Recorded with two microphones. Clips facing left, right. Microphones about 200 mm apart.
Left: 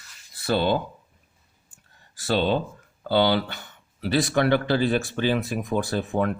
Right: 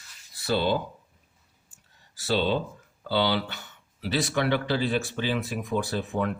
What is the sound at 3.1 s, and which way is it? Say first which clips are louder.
Speech: left 4 dB; 50° left (ahead or behind).